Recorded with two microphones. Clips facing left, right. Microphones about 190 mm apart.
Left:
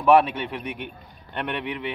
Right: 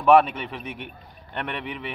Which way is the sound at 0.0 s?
Centre (ahead or behind).